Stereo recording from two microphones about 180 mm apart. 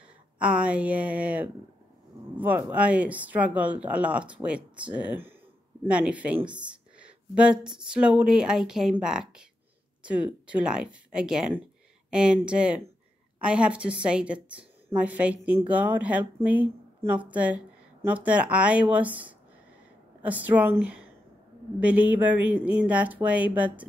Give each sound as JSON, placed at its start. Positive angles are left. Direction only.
{"t": 0.4, "sound": "a woman's voice", "side_deg": -5}